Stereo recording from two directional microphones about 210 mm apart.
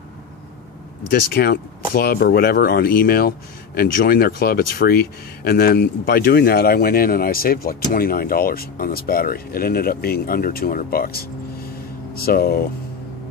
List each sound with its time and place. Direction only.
1.1 s speech: 50° left (ahead or behind)